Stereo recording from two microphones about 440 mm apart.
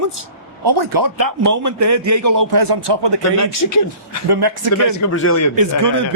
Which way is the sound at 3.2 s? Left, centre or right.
Left.